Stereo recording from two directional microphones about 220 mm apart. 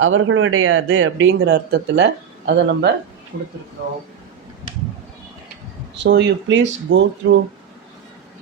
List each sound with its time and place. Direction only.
0.0 s speech: 65° right (ahead or behind)
6.0 s speech: 50° right (ahead or behind)